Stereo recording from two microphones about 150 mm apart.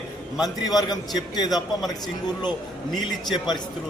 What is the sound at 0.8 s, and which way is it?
Speech, 25° left (ahead or behind).